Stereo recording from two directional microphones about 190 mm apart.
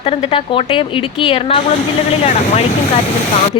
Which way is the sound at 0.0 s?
30° left (ahead or behind).